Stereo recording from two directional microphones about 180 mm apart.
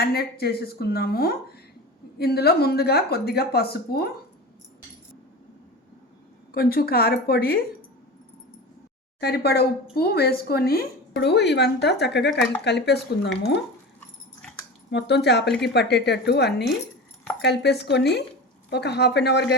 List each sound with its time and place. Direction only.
0.0 s speech: 60° left (ahead or behind)
6.5 s speech: 55° left (ahead or behind)
9.2 s a woman's voice: 65° left (ahead or behind)
14.8 s a woman's voice: 70° left (ahead or behind)